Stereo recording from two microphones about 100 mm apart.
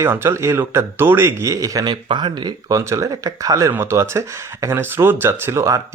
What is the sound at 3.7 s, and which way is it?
Speech, 25° right (ahead or behind).